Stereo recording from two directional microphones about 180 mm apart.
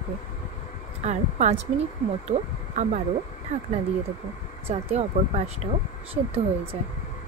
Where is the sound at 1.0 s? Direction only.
40° right (ahead or behind).